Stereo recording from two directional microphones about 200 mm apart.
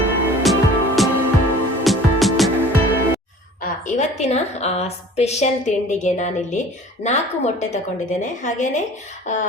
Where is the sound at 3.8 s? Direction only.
35° left (ahead or behind).